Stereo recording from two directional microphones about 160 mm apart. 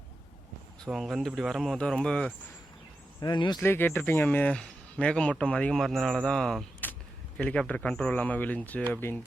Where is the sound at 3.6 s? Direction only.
10° left (ahead or behind).